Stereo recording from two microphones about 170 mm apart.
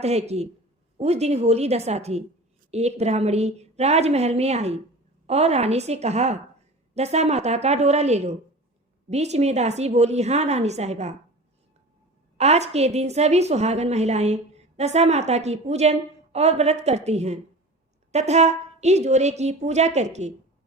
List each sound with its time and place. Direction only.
0.0 s a woman's voice: 40° right (ahead or behind)
12.4 s a woman's voice: 40° right (ahead or behind)